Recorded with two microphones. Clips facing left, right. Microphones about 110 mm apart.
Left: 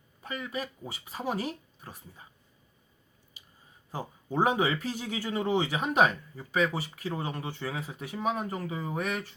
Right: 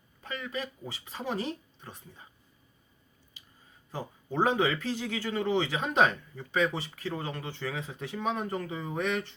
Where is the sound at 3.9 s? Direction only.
15° left (ahead or behind).